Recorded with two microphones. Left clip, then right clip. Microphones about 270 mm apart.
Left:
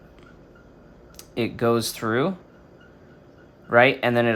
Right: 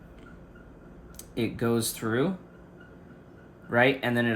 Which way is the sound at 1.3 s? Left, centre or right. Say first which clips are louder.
Left 6 dB; centre.